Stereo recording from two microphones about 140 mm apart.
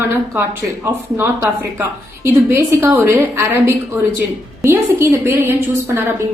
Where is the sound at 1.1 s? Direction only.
15° right (ahead or behind).